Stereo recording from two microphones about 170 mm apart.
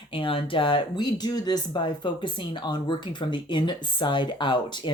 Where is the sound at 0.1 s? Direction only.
30° left (ahead or behind).